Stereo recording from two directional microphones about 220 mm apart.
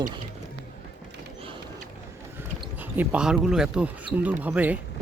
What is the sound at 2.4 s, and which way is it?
Speech, 10° right (ahead or behind).